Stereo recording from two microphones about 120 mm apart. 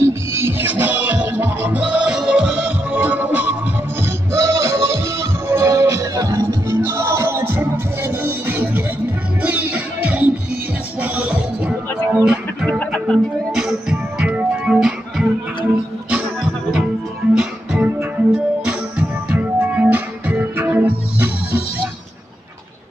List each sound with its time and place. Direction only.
0.0 s music: 20° right (ahead or behind)
12.6 s music: 10° left (ahead or behind); by 15.2 s 5° right (ahead or behind)
17.3 s music: 5° right (ahead or behind)